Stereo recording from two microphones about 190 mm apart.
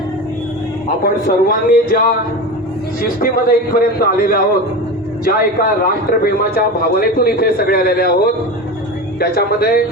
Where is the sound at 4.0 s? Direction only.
50° left (ahead or behind).